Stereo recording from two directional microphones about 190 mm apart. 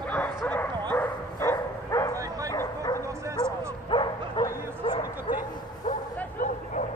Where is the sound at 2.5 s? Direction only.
20° left (ahead or behind).